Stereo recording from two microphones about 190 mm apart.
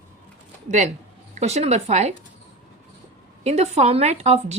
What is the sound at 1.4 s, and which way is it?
Speech, 35° right (ahead or behind).